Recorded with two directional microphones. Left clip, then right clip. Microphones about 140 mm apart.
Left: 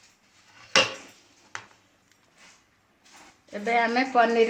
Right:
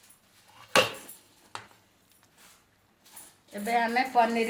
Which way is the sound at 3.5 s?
75° left (ahead or behind).